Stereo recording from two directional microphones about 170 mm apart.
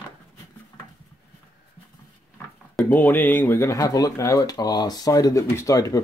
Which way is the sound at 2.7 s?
10° left (ahead or behind).